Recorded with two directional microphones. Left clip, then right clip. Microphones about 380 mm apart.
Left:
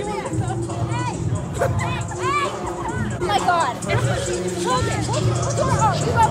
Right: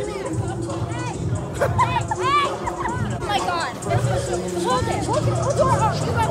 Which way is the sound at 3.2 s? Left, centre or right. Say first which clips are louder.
Left 4 dB; centre.